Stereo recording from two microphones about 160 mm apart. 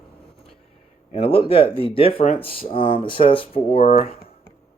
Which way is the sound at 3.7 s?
55° left (ahead or behind).